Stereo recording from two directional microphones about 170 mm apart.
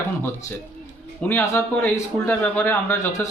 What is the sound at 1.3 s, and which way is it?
A man's voice, 10° left (ahead or behind).